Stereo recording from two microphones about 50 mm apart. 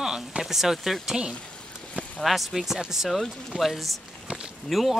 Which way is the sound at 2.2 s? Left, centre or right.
Centre.